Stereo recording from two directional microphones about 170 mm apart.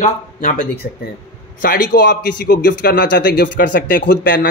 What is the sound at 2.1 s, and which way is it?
Speech, 85° left.